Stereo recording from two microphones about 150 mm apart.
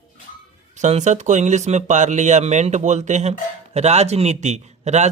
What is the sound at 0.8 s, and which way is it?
Speech, 50° right (ahead or behind).